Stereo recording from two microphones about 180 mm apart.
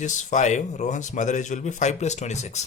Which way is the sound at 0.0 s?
45° left (ahead or behind).